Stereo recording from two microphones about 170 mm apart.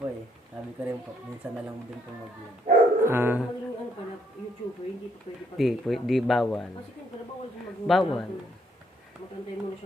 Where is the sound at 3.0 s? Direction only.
15° right (ahead or behind).